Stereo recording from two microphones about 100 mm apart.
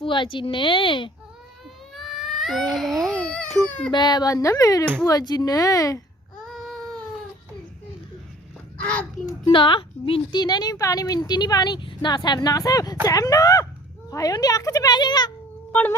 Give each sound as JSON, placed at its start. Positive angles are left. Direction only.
{"t": 0.0, "sound": "speech", "side_deg": 55}
{"t": 1.9, "sound": "baby cry", "side_deg": 0}
{"t": 3.7, "sound": "a child's voice", "side_deg": 10}
{"t": 3.9, "sound": "a woman's voice", "side_deg": 45}
{"t": 6.4, "sound": "baby cry", "side_deg": 5}
{"t": 8.8, "sound": "a child's voice", "side_deg": 15}
{"t": 9.4, "sound": "a woman's voice", "side_deg": 55}